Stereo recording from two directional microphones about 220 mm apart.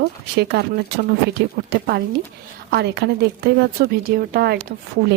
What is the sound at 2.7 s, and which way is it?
Speech, 50° right (ahead or behind).